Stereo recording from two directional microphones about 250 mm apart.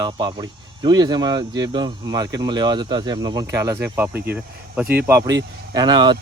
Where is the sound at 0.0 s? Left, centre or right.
Centre.